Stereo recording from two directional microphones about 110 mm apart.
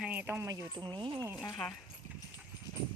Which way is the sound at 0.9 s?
45° right (ahead or behind).